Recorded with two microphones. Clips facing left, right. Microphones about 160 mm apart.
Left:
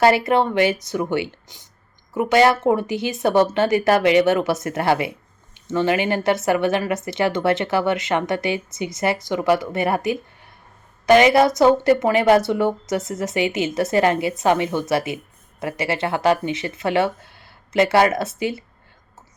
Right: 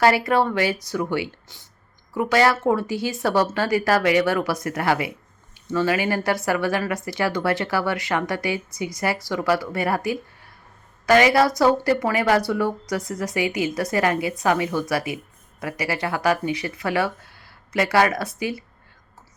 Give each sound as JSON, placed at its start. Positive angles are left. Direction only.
{"t": 0.0, "sound": "speech", "side_deg": 25}